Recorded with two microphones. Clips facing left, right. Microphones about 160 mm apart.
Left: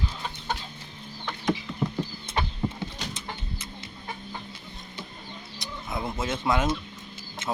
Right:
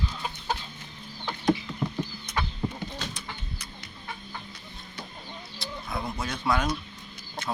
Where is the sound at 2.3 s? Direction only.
25° left (ahead or behind).